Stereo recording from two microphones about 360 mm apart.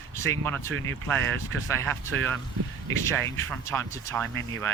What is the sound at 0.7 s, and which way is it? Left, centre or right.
Speech, right.